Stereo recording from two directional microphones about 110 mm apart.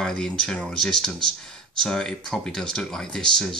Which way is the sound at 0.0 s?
5° left (ahead or behind).